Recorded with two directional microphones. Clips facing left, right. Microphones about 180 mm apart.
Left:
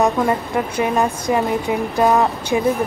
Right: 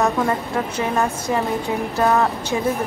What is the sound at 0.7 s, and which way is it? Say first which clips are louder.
A woman's voice: left 3 dB; 15° left (ahead or behind).